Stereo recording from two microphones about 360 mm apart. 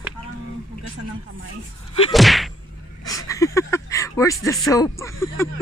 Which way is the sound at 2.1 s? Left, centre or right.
Centre.